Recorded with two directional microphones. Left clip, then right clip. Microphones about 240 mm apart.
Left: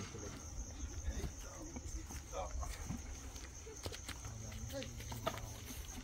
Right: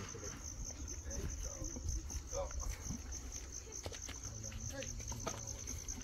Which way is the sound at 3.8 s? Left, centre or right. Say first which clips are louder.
Left 2 dB; left.